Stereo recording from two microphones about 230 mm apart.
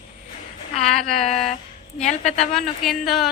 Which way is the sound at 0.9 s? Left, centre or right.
Centre.